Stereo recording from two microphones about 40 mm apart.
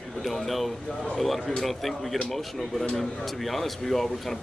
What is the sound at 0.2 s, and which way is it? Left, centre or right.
Speech, centre.